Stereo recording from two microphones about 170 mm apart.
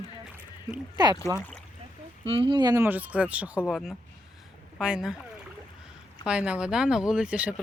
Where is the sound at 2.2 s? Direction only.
30° right (ahead or behind); by 5.2 s 5° right (ahead or behind).